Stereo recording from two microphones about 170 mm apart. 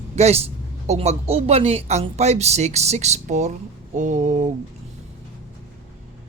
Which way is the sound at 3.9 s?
45° right (ahead or behind).